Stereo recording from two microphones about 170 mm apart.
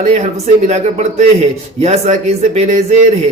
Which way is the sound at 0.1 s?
40° right (ahead or behind).